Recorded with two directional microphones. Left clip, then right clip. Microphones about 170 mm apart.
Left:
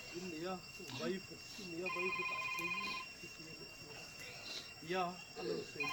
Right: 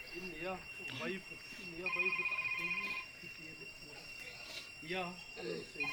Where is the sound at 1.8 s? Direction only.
25° left (ahead or behind).